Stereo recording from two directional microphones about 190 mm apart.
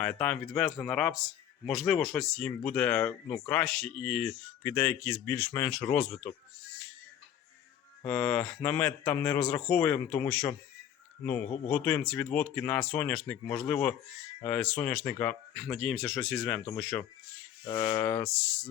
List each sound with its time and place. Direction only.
0.0 s speech: 5° left (ahead or behind)
8.0 s speech: 5° left (ahead or behind)
17.7 s speech: 20° left (ahead or behind)